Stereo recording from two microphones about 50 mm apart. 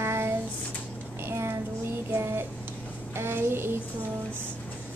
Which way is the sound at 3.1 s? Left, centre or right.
Right.